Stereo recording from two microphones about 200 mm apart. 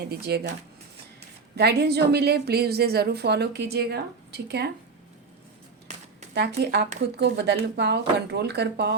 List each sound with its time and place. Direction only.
0.0 s a woman's voice: 55° right (ahead or behind)
1.5 s a woman's voice: 55° right (ahead or behind)
6.6 s speech: 55° right (ahead or behind)